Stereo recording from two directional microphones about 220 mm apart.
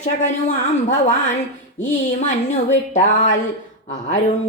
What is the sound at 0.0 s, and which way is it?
Speech, 35° left (ahead or behind).